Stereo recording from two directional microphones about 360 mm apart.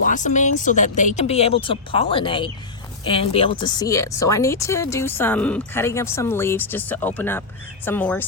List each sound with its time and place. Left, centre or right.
0.0 s speech: left; by 8.2 s centre